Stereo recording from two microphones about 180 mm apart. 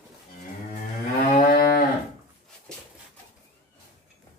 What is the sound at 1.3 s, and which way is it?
Moo, 55° left (ahead or behind).